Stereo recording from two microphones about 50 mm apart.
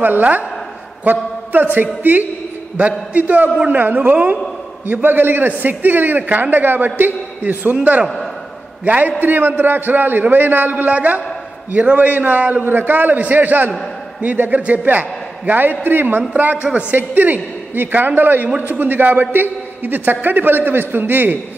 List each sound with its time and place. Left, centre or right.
0.0 s a man's voice: right
3.1 s a man's voice: right